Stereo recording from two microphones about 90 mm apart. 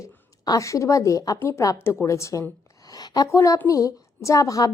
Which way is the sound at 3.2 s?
35° left (ahead or behind).